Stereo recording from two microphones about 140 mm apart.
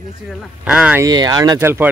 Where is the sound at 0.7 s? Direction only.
5° right (ahead or behind).